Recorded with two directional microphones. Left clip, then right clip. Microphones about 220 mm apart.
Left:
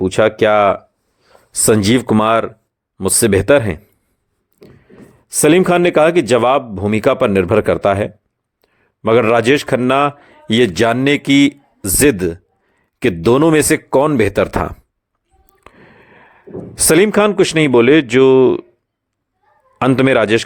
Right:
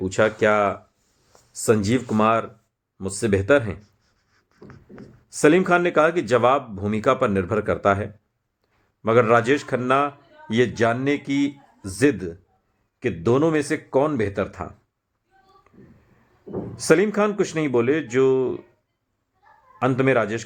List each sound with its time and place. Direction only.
0.0 s speech: 40° left (ahead or behind)
5.3 s a man's voice: 40° left (ahead or behind)
15.6 s a sound: 35° left (ahead or behind)
16.7 s speech: 40° left (ahead or behind)
19.8 s speech: 40° left (ahead or behind)